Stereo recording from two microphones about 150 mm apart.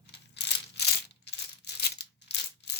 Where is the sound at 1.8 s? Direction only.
90° left.